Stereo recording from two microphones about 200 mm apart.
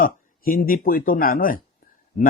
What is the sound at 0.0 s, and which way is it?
Speech, 45° left (ahead or behind).